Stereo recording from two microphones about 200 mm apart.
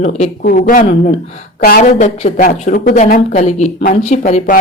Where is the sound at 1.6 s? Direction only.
45° left (ahead or behind).